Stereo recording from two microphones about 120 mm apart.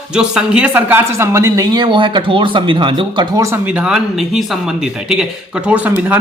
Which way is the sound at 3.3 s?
25° right (ahead or behind).